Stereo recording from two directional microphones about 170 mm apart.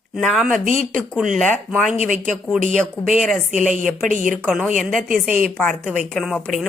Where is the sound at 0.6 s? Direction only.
50° right (ahead or behind).